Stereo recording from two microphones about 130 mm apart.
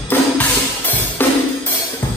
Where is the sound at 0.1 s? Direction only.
15° left (ahead or behind).